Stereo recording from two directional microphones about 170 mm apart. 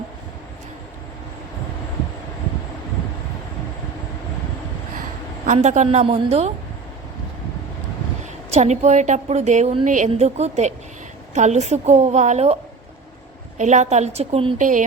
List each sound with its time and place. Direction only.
5.5 s a woman's voice: 45° right (ahead or behind)
8.4 s a woman's voice: 40° right (ahead or behind)
13.6 s a woman's voice: 45° right (ahead or behind)
14.6 s a woman's voice: 50° right (ahead or behind)